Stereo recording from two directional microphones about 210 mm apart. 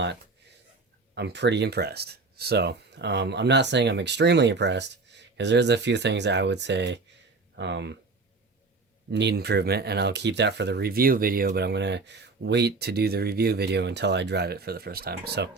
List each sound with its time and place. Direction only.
1.1 s speech: 55° right (ahead or behind)
9.1 s speech: 50° right (ahead or behind)